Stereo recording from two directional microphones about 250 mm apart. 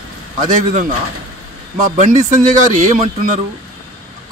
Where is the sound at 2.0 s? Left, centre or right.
Right.